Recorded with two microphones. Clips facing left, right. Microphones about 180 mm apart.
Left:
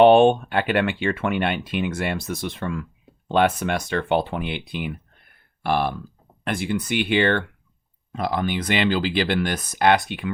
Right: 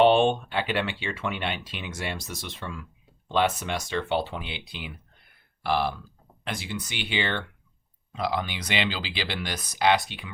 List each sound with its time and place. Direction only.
0.0 s speech: 55° left (ahead or behind)